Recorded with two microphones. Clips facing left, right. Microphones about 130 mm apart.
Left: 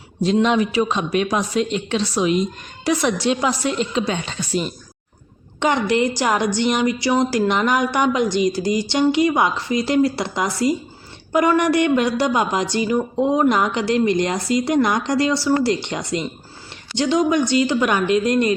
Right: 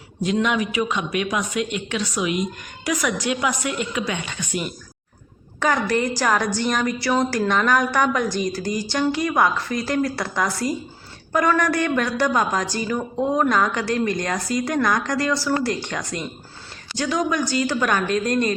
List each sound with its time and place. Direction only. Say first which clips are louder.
0.4 s a woman's voice: left 4 dB; 30° left (ahead or behind); by 18.5 s 15° left (ahead or behind)